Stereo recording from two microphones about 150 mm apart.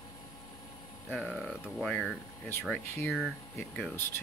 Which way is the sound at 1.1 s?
Centre (ahead or behind).